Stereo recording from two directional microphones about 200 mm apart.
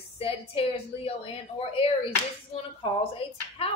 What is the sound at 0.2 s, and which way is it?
A woman's voice, 30° left (ahead or behind).